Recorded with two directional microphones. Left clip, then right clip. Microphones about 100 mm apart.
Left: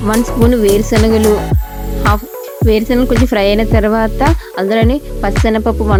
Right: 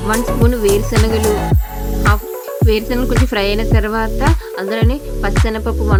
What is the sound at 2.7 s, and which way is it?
Speech, 45° left (ahead or behind).